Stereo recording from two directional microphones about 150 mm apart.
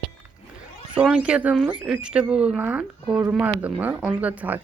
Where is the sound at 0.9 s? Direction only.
5° right (ahead or behind).